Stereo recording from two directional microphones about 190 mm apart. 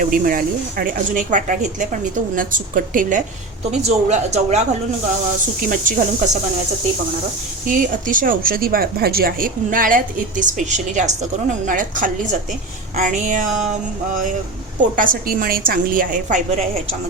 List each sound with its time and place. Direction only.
0.0 s speech: 45° right (ahead or behind)
5.6 s speech: 40° right (ahead or behind)
7.7 s speech: 45° right (ahead or behind)